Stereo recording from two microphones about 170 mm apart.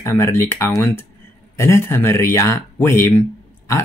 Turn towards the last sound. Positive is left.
turn(degrees=15)  # may be behind; listen again after turning